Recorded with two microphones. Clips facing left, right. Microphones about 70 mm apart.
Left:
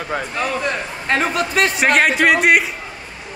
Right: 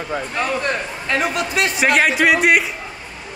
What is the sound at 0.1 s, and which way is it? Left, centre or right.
Speech, left.